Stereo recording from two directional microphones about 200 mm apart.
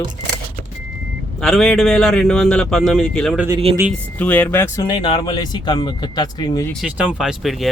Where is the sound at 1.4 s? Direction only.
Centre (ahead or behind); by 6.7 s 20° left (ahead or behind).